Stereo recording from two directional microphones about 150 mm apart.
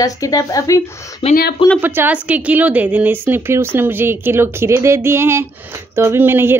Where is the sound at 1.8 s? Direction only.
15° right (ahead or behind).